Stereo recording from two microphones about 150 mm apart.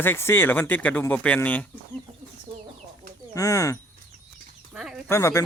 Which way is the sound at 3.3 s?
20° left (ahead or behind).